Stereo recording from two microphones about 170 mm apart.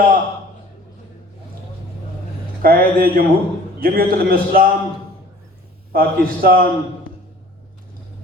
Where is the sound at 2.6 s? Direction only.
60° right (ahead or behind).